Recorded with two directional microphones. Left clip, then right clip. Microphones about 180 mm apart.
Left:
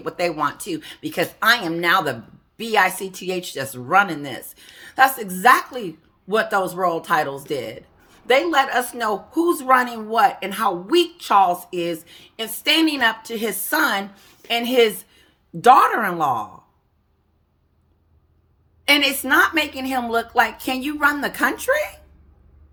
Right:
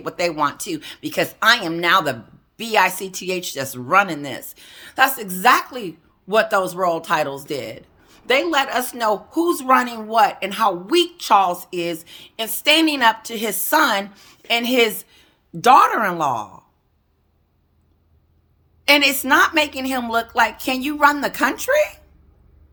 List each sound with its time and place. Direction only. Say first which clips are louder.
0.0 s a woman's voice: right 1 dB; 15° right (ahead or behind)
18.9 s a woman's voice: right 2 dB; 15° right (ahead or behind)